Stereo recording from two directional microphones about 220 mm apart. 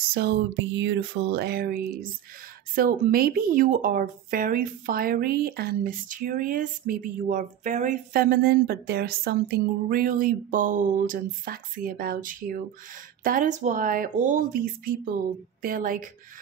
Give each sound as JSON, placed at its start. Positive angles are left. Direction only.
{"t": 0.1, "sound": "speech", "side_deg": -50}